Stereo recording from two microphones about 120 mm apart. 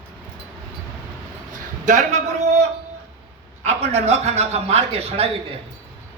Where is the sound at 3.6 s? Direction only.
65° right (ahead or behind).